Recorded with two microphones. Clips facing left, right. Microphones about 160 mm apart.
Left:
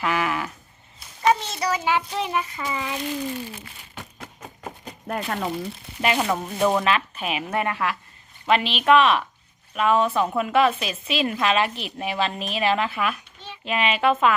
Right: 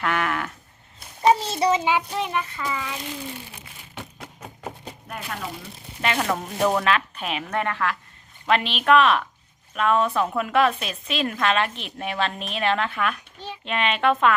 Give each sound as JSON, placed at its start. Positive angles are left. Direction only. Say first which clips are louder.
{"t": 0.0, "sound": "livestock", "louder": "left 1 dB", "side_deg": 5}
{"t": 1.2, "sound": "child singing", "louder": "right 2 dB", "side_deg": -30}
{"t": 2.1, "sound": "a woman's voice", "louder": "left 1 dB", "side_deg": 0}
{"t": 2.4, "sound": "a child's voice", "louder": "even", "side_deg": 15}
{"t": 3.9, "sound": "music", "louder": "right 2 dB", "side_deg": -5}
{"t": 5.0, "sound": "speech", "louder": "left 7 dB", "side_deg": 50}
{"t": 6.0, "sound": "speech", "louder": "left 2 dB", "side_deg": 15}
{"t": 6.2, "sound": "a woman's voice", "louder": "left 1 dB", "side_deg": 5}